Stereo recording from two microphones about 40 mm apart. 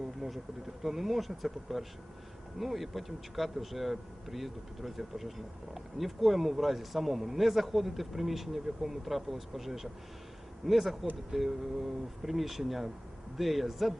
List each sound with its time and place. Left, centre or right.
0.2 s speech: centre